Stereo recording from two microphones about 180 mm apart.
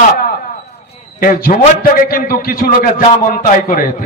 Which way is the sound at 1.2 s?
55° left (ahead or behind).